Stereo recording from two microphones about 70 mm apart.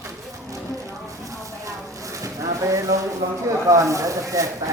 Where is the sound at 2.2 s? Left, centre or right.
Right.